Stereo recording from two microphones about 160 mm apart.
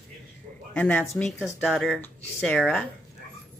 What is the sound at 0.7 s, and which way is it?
Speech, 10° left (ahead or behind).